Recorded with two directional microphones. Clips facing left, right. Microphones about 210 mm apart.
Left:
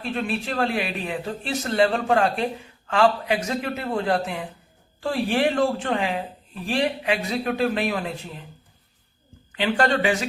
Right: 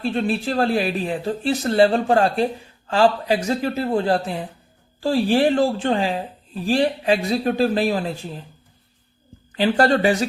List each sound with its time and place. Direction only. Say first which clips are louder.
0.0 s speech: right 5 dB; 35° right (ahead or behind)
9.5 s speech: right 4 dB; 35° right (ahead or behind)